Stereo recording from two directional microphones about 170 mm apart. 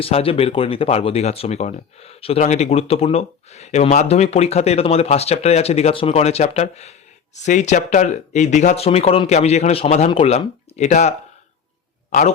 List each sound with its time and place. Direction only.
0.0 s speech: 35° left (ahead or behind)